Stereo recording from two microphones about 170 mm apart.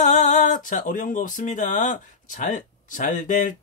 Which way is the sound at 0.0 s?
45° left (ahead or behind).